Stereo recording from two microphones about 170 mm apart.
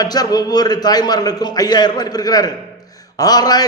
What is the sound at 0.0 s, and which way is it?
A man's voice, 20° left (ahead or behind).